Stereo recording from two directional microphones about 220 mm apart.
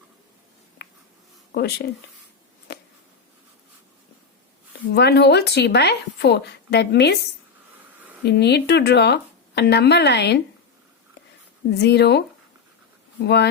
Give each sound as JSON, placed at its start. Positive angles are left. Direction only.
{"t": 0.8, "sound": "writing", "side_deg": 50}
{"t": 1.5, "sound": "a woman's voice", "side_deg": 50}
{"t": 2.7, "sound": "a sound", "side_deg": 50}
{"t": 4.9, "sound": "a woman's voice", "side_deg": 50}
{"t": 8.2, "sound": "a woman's voice", "side_deg": 50}
{"t": 11.8, "sound": "a woman's voice", "side_deg": 50}
{"t": 13.2, "sound": "a woman's voice", "side_deg": 50}